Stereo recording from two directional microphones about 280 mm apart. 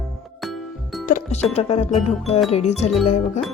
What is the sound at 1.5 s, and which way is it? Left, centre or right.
Speech, left.